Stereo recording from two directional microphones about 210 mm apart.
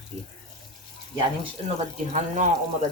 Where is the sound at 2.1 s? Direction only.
35° right (ahead or behind).